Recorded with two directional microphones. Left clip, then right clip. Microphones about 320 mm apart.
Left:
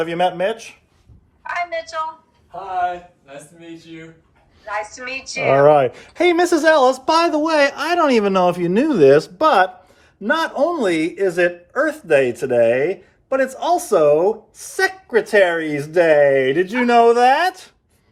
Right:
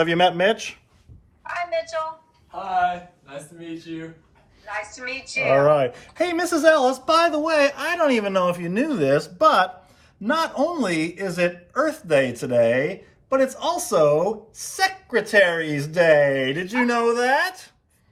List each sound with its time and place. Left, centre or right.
0.0 s speech: right
1.5 s a sound: centre
4.6 s speech: left
5.6 s speech: left